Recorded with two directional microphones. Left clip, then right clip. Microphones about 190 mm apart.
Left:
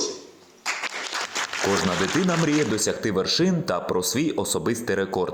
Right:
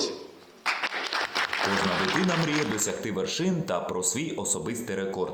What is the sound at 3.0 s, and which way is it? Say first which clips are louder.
Speech: left 7 dB; 30° left (ahead or behind).